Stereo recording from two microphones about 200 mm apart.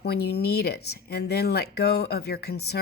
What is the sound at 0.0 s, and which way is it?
Speech, 55° left (ahead or behind).